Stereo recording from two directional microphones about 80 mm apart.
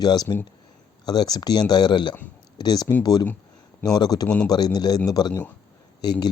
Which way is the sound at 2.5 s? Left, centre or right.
Left.